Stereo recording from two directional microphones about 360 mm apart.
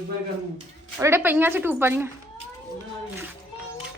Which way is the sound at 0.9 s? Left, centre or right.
Centre.